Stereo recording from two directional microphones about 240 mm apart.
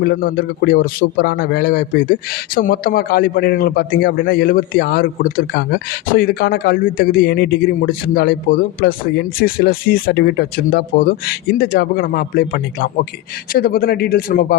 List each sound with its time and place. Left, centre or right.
0.0 s a man's voice: left